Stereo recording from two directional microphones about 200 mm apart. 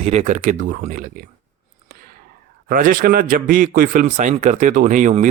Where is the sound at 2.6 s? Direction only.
45° right (ahead or behind).